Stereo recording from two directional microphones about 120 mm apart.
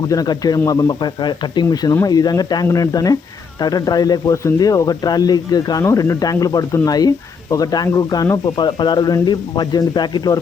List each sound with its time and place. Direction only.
0.1 s speech: 30° left (ahead or behind)